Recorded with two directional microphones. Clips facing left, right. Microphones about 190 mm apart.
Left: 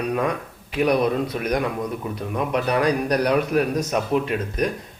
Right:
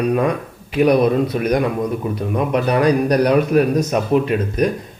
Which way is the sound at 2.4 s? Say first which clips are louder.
Right 4 dB; 45° right (ahead or behind).